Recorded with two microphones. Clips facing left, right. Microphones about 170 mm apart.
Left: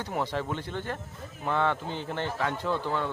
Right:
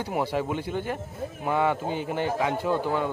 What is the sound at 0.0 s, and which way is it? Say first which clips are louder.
Speech: right 4 dB; 10° right (ahead or behind).